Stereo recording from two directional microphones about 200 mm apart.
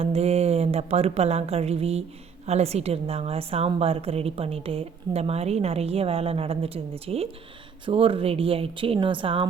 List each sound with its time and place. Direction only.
0.0 s a woman's voice: 30° right (ahead or behind)